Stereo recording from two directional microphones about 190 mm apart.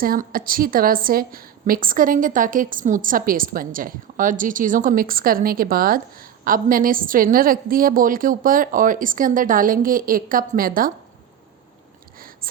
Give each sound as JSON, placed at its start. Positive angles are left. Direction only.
{"t": 0.0, "sound": "a woman's voice", "side_deg": -50}